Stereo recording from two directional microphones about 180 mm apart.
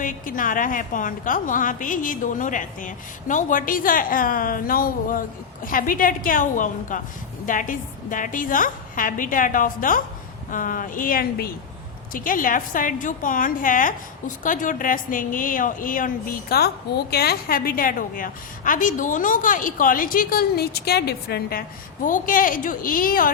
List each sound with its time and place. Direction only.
0.0 s a woman's voice: 45° left (ahead or behind)
22.0 s a woman's voice: 50° left (ahead or behind)